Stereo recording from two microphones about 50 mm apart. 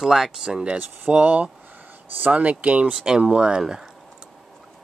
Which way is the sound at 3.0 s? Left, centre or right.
Centre.